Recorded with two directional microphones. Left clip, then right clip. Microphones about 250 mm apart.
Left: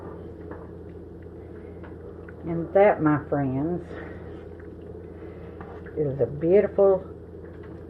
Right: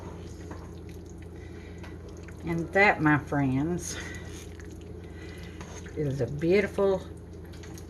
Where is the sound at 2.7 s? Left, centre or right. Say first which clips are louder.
Left 3 dB; right.